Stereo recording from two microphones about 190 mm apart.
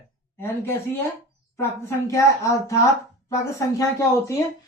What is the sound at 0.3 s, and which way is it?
A woman's voice, 15° left (ahead or behind).